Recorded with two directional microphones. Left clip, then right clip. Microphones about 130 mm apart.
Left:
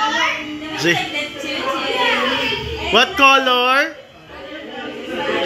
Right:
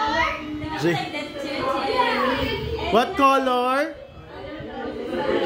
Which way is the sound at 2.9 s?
30° right (ahead or behind).